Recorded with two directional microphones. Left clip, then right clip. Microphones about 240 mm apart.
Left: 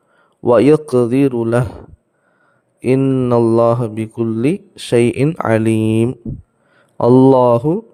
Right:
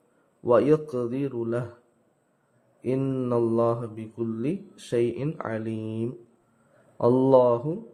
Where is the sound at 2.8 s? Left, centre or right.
Left.